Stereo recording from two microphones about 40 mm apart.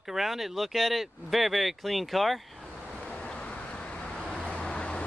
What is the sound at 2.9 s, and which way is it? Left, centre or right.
Vehicle, left.